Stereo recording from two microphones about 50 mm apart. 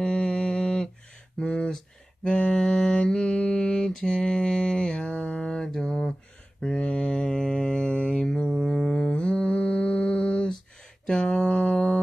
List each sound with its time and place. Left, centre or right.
0.0 s mantra: left
1.4 s speech: left
2.2 s mantra: centre
5.6 s mantra: centre